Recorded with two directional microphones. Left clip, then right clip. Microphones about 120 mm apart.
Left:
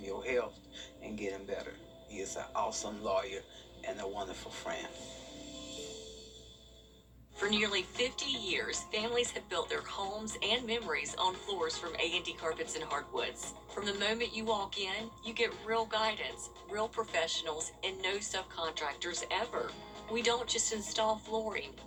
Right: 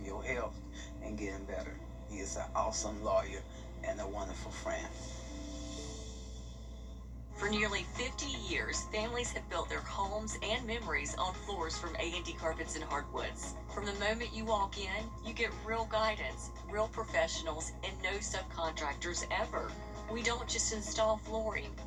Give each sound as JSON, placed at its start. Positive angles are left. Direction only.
{"t": 0.0, "sound": "a sound", "side_deg": 15}
{"t": 1.2, "sound": "a woman's voice", "side_deg": 15}
{"t": 7.3, "sound": "a woman's voice", "side_deg": 15}